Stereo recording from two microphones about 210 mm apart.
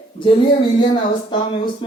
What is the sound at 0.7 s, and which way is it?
Speech, 25° left (ahead or behind).